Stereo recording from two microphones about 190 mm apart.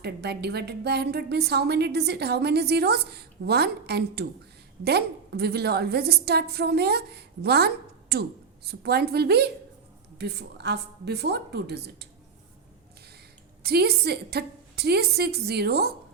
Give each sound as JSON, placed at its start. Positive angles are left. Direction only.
{"t": 0.0, "sound": "a woman's voice", "side_deg": -60}
{"t": 13.6, "sound": "a woman's voice", "side_deg": -55}